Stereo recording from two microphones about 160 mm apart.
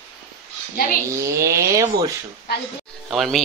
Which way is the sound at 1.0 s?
20° right (ahead or behind).